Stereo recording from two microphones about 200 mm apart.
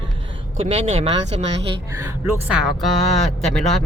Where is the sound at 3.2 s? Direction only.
35° left (ahead or behind).